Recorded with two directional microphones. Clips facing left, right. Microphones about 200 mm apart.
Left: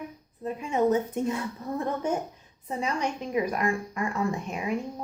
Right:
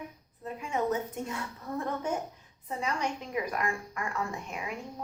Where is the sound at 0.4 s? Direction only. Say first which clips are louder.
Left 6 dB; 20° left (ahead or behind).